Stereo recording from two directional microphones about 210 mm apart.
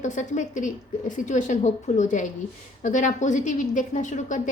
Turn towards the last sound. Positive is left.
turn(degrees=35)  # may be behind; listen again after turning